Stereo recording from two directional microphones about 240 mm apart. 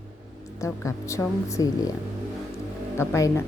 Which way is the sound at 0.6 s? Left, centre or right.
Centre.